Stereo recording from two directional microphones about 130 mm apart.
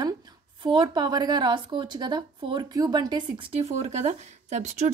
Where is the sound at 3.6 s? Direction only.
60° right (ahead or behind).